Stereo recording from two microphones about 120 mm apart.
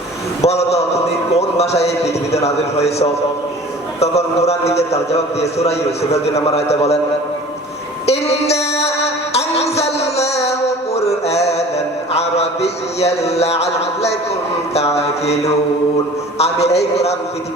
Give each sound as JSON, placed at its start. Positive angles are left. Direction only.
{"t": 0.4, "sound": "a man's voice", "side_deg": 60}
{"t": 8.0, "sound": "a sound", "side_deg": 60}
{"t": 9.3, "sound": "music", "side_deg": 60}
{"t": 10.9, "sound": "mantra", "side_deg": 60}
{"t": 12.1, "sound": "a sound", "side_deg": 60}
{"t": 14.7, "sound": "a man's voice", "side_deg": 60}
{"t": 16.4, "sound": "a man's voice", "side_deg": 60}